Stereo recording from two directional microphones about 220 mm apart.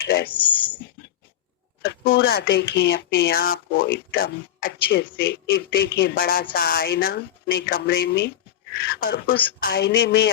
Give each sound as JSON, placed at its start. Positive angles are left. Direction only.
{"t": 0.0, "sound": "speech", "side_deg": 45}
{"t": 0.3, "sound": "a sound", "side_deg": 25}
{"t": 1.8, "sound": "speech", "side_deg": 45}